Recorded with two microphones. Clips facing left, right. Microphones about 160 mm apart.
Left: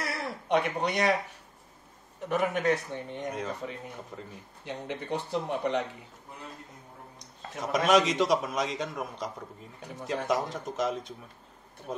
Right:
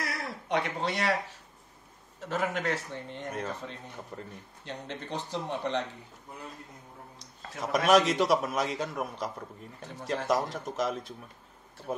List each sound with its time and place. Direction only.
0.0 s a sound: 25° left (ahead or behind)
2.1 s speech: 15° left (ahead or behind)
4.1 s speech: 5° left (ahead or behind)
7.6 s a man's voice: centre (ahead or behind)